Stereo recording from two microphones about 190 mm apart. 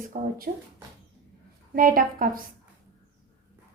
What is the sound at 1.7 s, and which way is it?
Speech, 45° right (ahead or behind).